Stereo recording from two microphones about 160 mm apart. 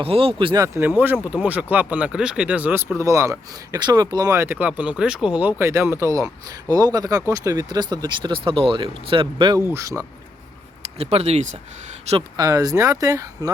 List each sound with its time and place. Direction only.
0.0 s speech: 35° right (ahead or behind)
9.7 s speech: 20° right (ahead or behind)
10.9 s speech: 40° right (ahead or behind)
12.4 s speech: 20° right (ahead or behind)